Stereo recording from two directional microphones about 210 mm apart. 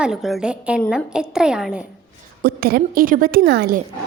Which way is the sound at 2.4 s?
45° right (ahead or behind).